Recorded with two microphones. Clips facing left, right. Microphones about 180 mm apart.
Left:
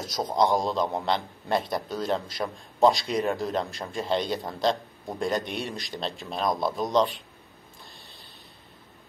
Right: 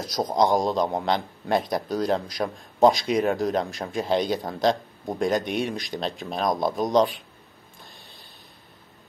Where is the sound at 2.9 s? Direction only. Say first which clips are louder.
Right 4 dB; centre (ahead or behind).